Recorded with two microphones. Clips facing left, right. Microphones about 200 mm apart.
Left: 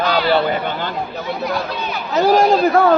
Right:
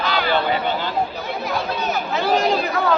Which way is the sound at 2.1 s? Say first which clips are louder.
Left 7 dB; 40° left (ahead or behind).